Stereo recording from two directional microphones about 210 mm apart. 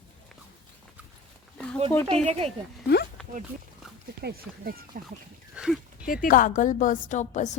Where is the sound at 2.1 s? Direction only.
30° right (ahead or behind).